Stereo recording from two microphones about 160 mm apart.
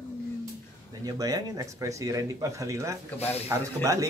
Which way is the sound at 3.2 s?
40° left (ahead or behind).